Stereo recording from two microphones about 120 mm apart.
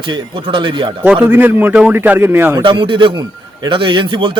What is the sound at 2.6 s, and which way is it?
A man's voice, 45° right (ahead or behind).